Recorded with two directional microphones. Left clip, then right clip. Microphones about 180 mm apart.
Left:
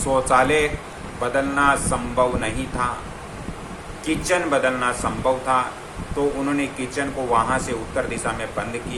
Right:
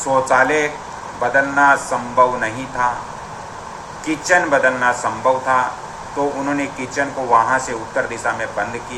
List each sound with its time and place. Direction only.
0.1 s speech: 20° left (ahead or behind)
4.0 s speech: 20° left (ahead or behind)